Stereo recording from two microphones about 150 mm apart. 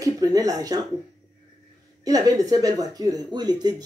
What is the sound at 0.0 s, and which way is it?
Speech, 25° right (ahead or behind).